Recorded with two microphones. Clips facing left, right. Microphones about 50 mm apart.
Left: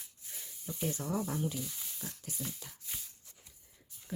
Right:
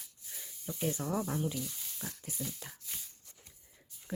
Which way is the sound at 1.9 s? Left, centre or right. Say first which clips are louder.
Right 1 dB; right.